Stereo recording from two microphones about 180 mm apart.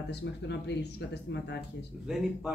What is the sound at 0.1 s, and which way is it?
Speech, 70° left (ahead or behind).